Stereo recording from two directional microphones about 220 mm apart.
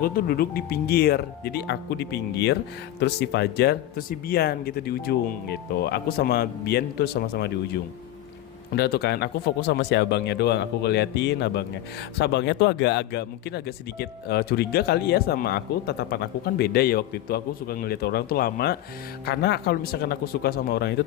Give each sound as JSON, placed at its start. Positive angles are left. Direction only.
{"t": 0.0, "sound": "speech", "side_deg": 40}